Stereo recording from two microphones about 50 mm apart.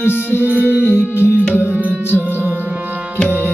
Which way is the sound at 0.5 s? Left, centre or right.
Right.